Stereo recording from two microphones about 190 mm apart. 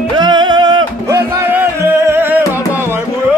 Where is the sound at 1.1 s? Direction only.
10° right (ahead or behind).